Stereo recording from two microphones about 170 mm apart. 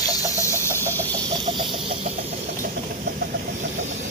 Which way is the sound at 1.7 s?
35° right (ahead or behind).